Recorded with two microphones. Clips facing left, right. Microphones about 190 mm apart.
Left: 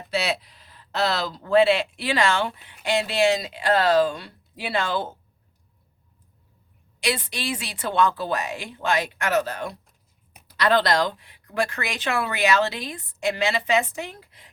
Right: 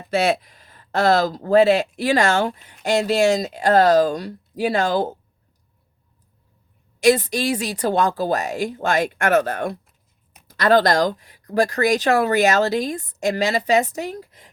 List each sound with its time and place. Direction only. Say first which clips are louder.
0.1 s speech: right 7 dB; 50° right (ahead or behind)
7.0 s speech: right 11 dB; 45° right (ahead or behind)